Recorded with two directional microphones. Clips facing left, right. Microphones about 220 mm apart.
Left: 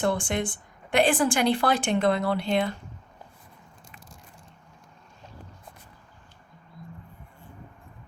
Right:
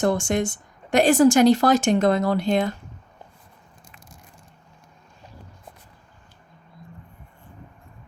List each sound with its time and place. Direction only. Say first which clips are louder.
0.0 s speech: right 5 dB; 45° right (ahead or behind)